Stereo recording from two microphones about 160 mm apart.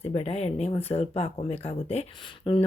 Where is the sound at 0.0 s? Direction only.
40° left (ahead or behind).